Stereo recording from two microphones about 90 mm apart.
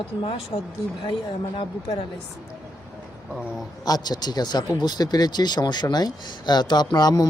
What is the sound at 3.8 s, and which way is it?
Speech, 50° left (ahead or behind).